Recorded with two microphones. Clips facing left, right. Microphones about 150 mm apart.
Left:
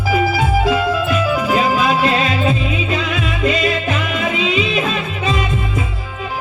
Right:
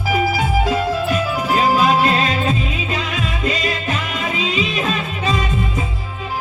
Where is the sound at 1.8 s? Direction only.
40° right (ahead or behind).